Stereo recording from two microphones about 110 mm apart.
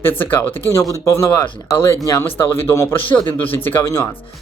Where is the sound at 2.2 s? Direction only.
20° left (ahead or behind).